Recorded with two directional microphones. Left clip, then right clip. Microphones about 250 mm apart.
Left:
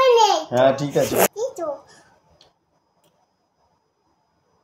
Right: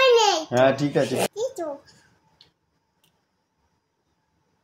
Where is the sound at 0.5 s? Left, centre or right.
Centre.